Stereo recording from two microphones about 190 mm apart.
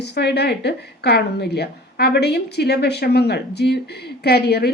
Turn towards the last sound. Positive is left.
turn(degrees=55)  # may be behind; listen again after turning